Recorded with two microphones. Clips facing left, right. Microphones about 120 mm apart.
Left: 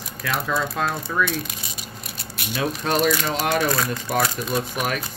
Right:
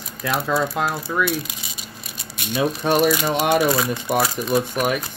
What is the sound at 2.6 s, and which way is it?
Speech, 5° right (ahead or behind).